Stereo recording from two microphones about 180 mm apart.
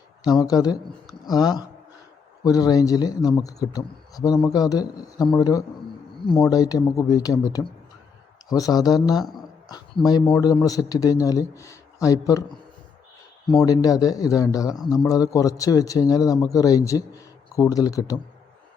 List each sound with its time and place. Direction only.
0.3 s speech: 20° left (ahead or behind)
13.7 s speech: 20° left (ahead or behind)